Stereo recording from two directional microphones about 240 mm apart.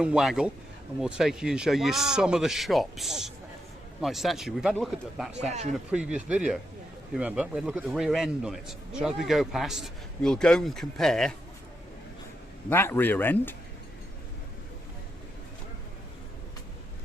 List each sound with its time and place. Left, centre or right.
0.0 s a man's voice: centre
5.4 s speech: right
5.7 s a man's voice: centre
12.7 s speech: centre